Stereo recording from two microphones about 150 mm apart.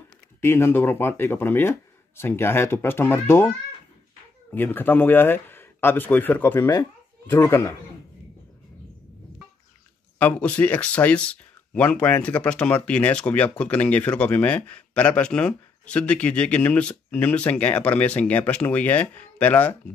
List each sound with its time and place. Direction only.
0.4 s speech: 15° left (ahead or behind)
10.1 s speech: 10° left (ahead or behind)